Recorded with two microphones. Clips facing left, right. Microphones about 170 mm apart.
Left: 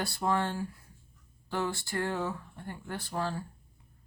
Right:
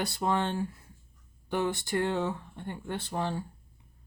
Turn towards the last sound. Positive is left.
turn(degrees=-20)  # may be behind; listen again after turning